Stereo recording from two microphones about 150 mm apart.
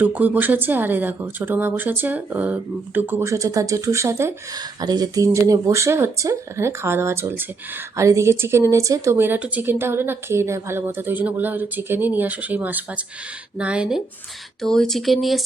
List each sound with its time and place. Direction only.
0.0 s speech: 10° right (ahead or behind)